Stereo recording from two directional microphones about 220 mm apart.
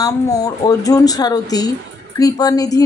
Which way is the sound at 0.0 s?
15° left (ahead or behind).